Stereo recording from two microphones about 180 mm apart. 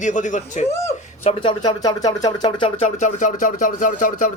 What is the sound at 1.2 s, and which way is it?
Speech, 25° left (ahead or behind).